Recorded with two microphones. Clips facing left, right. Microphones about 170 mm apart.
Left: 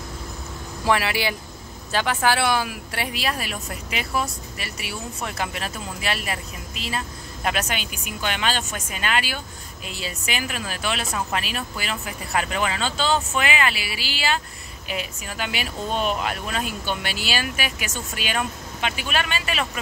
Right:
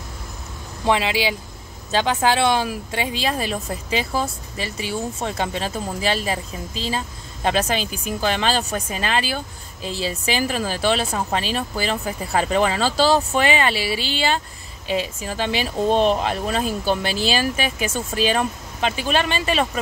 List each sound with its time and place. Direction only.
0.8 s a woman's voice: 20° right (ahead or behind)